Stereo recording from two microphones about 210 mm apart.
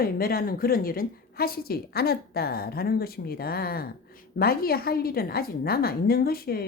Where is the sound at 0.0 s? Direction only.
45° left (ahead or behind).